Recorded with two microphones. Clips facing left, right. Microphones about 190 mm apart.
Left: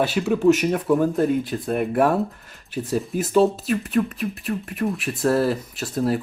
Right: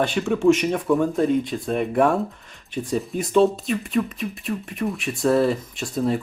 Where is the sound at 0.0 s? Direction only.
5° left (ahead or behind).